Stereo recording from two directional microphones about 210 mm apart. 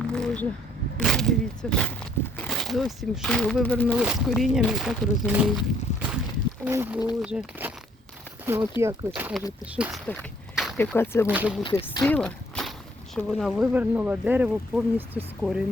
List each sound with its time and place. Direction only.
0.1 s speech: 5° left (ahead or behind)
3.9 s speech: 5° right (ahead or behind)
10.1 s a sound: centre (ahead or behind)
10.9 s speech: 10° left (ahead or behind)
11.3 s speech: 5° right (ahead or behind)
11.6 s speech: 20° left (ahead or behind)
12.0 s walk: 5° left (ahead or behind)
13.1 s speech: centre (ahead or behind)